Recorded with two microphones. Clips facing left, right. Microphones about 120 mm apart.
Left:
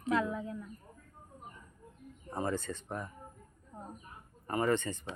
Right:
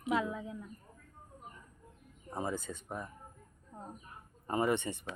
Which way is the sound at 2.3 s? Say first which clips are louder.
Left 2 dB; 5° right (ahead or behind).